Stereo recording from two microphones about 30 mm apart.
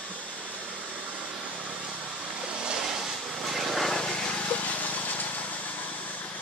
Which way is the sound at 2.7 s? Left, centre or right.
Centre.